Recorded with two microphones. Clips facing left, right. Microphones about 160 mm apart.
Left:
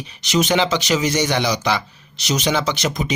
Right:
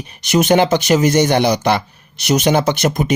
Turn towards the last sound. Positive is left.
turn(degrees=-55)  # may be behind; listen again after turning